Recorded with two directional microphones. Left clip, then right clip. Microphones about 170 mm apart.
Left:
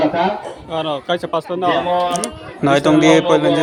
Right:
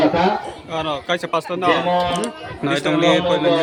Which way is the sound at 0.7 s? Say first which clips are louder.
Left 2 dB; 30° left (ahead or behind).